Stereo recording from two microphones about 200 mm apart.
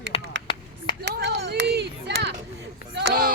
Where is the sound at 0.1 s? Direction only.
30° left (ahead or behind).